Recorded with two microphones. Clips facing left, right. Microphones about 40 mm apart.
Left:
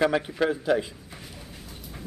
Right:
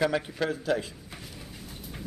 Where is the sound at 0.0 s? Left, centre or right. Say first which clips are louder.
Left 4 dB; centre.